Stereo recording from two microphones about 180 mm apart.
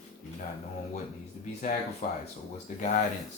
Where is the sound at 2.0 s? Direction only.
40° left (ahead or behind).